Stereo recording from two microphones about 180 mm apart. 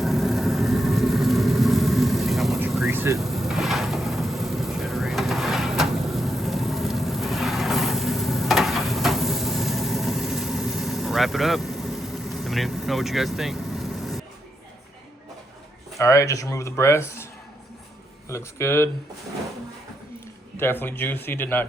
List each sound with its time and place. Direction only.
0.0 s vehicle: centre (ahead or behind)
16.0 s speech: 15° left (ahead or behind)
18.3 s speech: 15° left (ahead or behind)
20.6 s speech: 10° left (ahead or behind)